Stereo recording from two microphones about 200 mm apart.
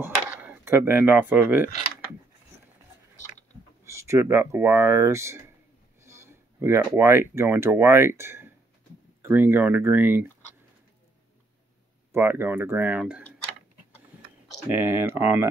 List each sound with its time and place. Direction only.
0.0 s speech: 10° right (ahead or behind)
3.8 s speech: 15° right (ahead or behind)
12.1 s speech: 10° right (ahead or behind)
14.7 s speech: 10° right (ahead or behind)